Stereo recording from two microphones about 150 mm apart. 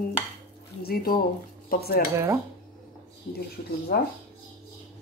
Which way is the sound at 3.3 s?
90° left.